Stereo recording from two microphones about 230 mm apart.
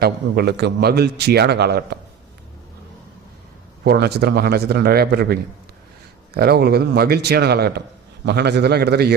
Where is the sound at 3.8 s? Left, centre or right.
Right.